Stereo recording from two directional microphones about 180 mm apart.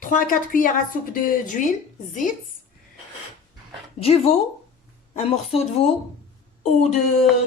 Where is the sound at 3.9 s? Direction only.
35° left (ahead or behind).